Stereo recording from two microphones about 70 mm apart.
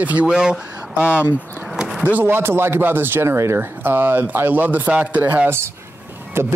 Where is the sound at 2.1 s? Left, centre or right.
Right.